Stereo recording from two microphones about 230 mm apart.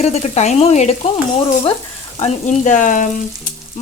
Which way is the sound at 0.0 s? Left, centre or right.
Left.